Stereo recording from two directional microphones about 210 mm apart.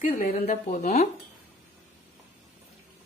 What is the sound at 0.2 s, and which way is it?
Speech, 35° left (ahead or behind).